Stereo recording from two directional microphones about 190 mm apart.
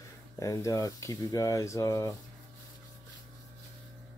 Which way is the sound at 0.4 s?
15° left (ahead or behind).